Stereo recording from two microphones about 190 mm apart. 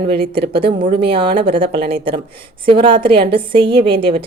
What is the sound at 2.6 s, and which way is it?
Speech, 25° right (ahead or behind).